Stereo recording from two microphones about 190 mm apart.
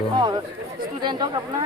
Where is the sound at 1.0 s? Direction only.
25° right (ahead or behind).